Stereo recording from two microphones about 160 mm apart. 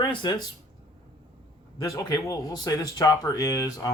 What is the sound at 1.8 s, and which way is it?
Speech, 20° left (ahead or behind).